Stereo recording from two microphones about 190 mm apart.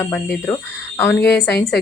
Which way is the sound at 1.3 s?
65° left (ahead or behind).